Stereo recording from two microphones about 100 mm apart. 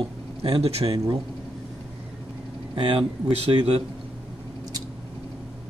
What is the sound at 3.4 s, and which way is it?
Speech, 75° right (ahead or behind).